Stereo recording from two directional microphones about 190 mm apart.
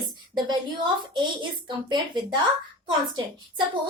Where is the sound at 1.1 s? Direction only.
25° right (ahead or behind).